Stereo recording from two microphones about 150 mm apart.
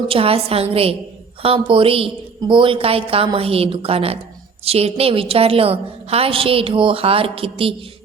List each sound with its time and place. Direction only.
0.1 s a woman's voice: 40° right (ahead or behind)